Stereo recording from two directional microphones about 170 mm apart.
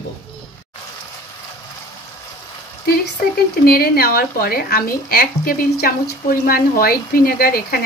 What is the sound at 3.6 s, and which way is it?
Speech, 60° left (ahead or behind).